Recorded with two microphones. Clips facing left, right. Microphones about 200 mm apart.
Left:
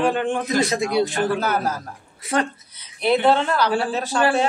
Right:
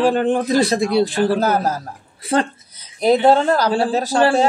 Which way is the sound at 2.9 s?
40° right (ahead or behind).